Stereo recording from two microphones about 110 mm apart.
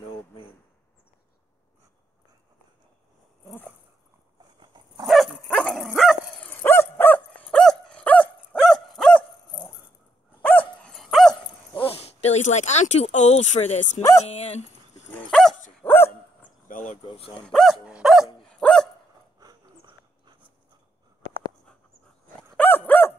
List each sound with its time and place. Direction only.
4.6 s dog: 40° right (ahead or behind)
5.0 s dog: centre (ahead or behind)
6.4 s dog: 20° left (ahead or behind)
10.9 s dog: centre (ahead or behind)
11.7 s speech: 55° left (ahead or behind); by 14.0 s 85° left
14.2 s speech: 70° left (ahead or behind)
15.0 s dog: 10° left (ahead or behind)
17.0 s dog: 55° left (ahead or behind)
17.4 s dog: 5° left (ahead or behind)
18.4 s dog: 10° left (ahead or behind)
22.6 s dog: 15° left (ahead or behind)